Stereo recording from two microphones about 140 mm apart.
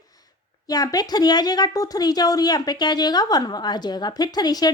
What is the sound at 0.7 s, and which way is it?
Speech, 25° left (ahead or behind).